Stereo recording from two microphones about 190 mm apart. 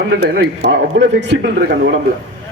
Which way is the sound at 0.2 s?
65° right (ahead or behind).